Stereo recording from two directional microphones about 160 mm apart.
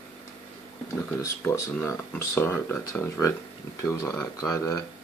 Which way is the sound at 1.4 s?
15° left (ahead or behind).